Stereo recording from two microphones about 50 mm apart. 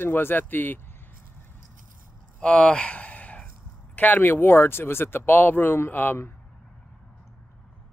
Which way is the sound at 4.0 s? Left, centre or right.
Left.